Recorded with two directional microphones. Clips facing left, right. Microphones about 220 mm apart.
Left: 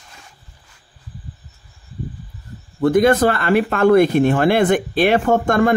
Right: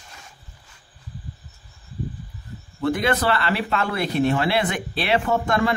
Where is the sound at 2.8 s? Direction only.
45° left (ahead or behind).